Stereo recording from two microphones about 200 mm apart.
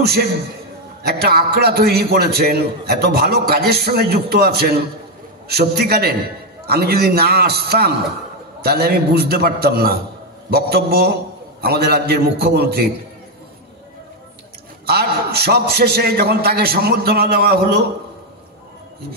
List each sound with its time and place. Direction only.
0.0 s a man's voice: 50° right (ahead or behind)
14.9 s a man's voice: 55° right (ahead or behind)